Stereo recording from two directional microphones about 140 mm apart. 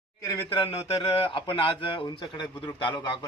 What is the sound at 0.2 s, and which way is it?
Speech, 20° left (ahead or behind).